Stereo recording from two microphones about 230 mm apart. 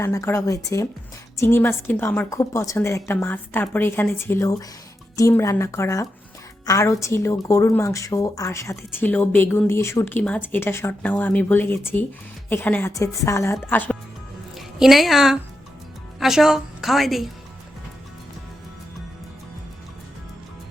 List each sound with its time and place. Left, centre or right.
0.0 s a woman's voice: centre